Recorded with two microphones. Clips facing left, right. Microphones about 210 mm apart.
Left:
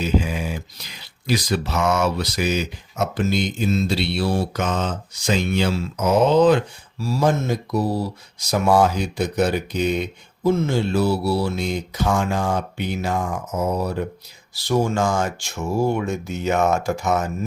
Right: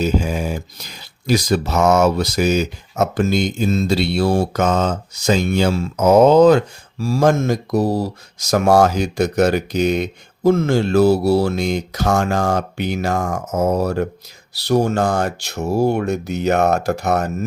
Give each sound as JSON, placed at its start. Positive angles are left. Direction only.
{"t": 0.0, "sound": "speech", "side_deg": -45}
{"t": 9.9, "sound": "speech", "side_deg": -90}
{"t": 10.9, "sound": "speech", "side_deg": -45}
{"t": 11.5, "sound": "speech", "side_deg": -85}
{"t": 12.0, "sound": "speech", "side_deg": -40}
{"t": 12.5, "sound": "speech", "side_deg": -90}
{"t": 13.0, "sound": "speech", "side_deg": -45}
{"t": 14.9, "sound": "speech", "side_deg": -60}
{"t": 15.5, "sound": "speech", "side_deg": -40}
{"t": 16.0, "sound": "speech", "side_deg": -65}